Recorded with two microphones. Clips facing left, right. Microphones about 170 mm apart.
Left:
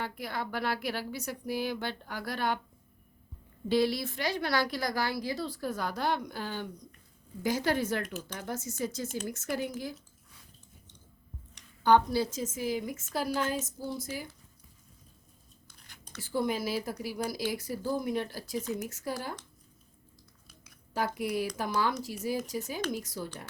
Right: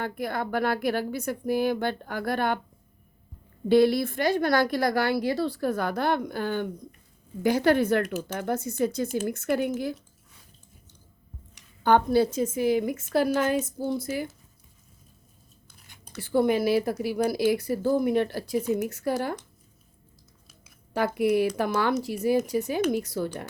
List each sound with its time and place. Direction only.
0.0 s speech: 50° right (ahead or behind)
3.7 s a woman's voice: 55° right (ahead or behind)
11.8 s a woman's voice: 55° right (ahead or behind)
16.2 s a woman's voice: 60° right (ahead or behind)
20.9 s a woman's voice: 65° right (ahead or behind)